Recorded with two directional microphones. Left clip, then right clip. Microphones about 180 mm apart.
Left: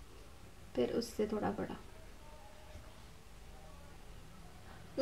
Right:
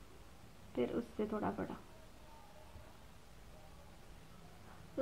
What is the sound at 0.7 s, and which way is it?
Speech, 15° right (ahead or behind).